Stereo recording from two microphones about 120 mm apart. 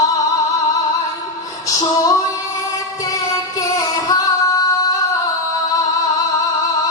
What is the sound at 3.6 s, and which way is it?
Singing, 30° left (ahead or behind).